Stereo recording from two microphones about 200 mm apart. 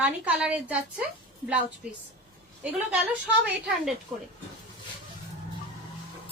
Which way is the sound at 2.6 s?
5° right (ahead or behind).